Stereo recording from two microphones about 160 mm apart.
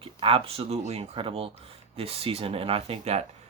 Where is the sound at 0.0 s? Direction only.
35° right (ahead or behind).